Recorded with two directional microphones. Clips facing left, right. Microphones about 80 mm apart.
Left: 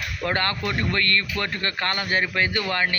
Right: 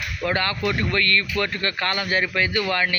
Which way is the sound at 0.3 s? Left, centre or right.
Left.